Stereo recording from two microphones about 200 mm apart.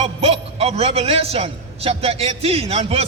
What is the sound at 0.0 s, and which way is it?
A man's voice, 30° right (ahead or behind).